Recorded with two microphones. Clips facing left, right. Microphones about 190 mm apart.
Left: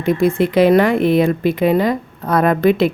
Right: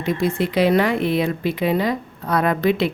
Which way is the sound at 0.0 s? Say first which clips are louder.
Left 6 dB; 55° left (ahead or behind).